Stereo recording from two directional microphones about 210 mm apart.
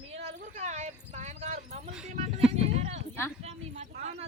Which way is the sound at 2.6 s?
30° right (ahead or behind).